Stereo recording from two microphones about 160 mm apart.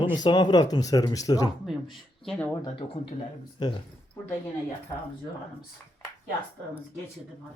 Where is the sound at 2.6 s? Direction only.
30° left (ahead or behind).